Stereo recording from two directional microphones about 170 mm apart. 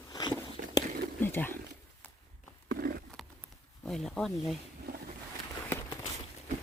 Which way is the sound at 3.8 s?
5° left (ahead or behind).